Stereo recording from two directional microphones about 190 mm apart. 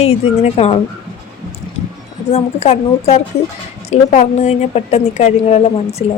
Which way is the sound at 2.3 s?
35° left (ahead or behind).